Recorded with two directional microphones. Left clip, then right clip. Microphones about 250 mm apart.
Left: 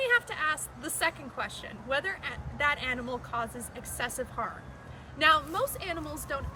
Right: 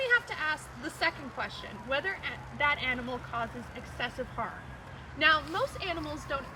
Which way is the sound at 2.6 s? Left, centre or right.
Centre.